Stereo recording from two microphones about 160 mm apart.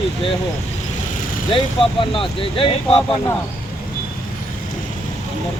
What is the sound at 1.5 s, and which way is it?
Speech, 35° left (ahead or behind).